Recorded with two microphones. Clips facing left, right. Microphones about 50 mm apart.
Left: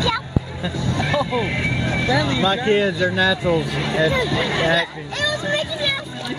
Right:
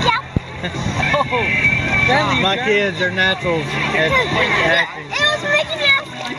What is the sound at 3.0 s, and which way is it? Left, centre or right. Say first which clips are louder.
Speech: right 1 dB; right.